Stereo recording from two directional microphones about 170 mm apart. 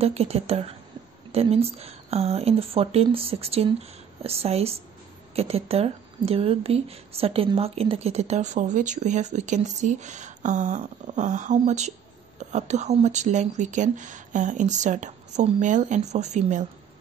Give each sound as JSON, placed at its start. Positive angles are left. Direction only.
{"t": 0.0, "sound": "speech", "side_deg": -35}